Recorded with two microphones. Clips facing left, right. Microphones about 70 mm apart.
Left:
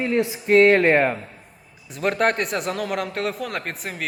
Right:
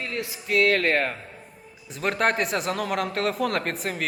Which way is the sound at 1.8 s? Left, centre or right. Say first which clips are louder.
Left 3 dB; centre.